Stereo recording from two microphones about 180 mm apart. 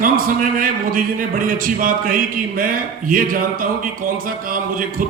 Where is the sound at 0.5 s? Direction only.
50° right (ahead or behind).